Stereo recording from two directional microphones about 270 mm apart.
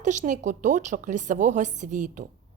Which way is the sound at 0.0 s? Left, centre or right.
Right.